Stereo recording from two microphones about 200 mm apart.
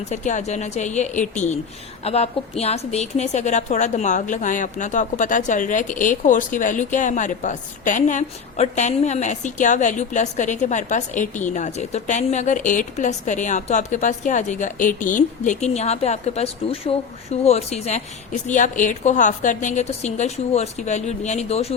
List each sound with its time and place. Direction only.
0.1 s a woman's voice: 35° left (ahead or behind)